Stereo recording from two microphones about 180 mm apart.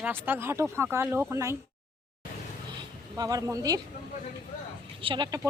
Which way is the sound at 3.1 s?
20° right (ahead or behind).